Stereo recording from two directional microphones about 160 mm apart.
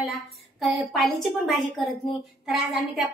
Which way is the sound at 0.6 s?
Centre (ahead or behind).